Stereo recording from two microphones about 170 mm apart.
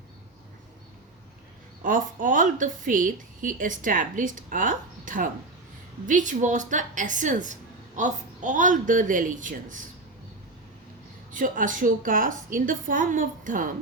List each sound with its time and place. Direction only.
1.8 s a woman's voice: 50° right (ahead or behind)
11.3 s a woman's voice: 50° right (ahead or behind)